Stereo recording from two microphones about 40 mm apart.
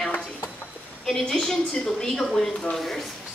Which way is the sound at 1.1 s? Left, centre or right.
Centre.